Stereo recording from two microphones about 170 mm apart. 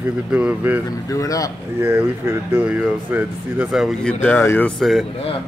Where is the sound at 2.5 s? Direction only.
10° right (ahead or behind); by 4.7 s 10° left (ahead or behind).